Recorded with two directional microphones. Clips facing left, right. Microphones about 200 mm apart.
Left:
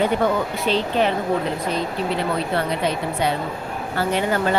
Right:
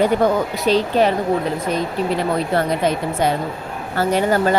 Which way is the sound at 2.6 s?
45° right (ahead or behind).